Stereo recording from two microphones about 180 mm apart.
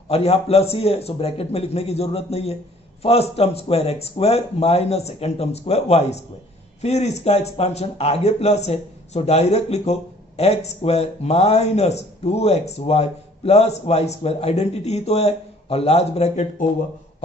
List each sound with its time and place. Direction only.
0.1 s speech: 35° left (ahead or behind)